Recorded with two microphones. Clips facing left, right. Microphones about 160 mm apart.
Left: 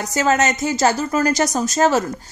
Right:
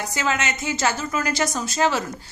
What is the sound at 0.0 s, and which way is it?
A woman's voice, 40° left (ahead or behind).